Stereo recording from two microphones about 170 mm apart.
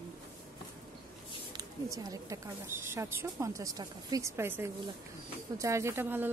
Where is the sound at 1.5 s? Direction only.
20° right (ahead or behind).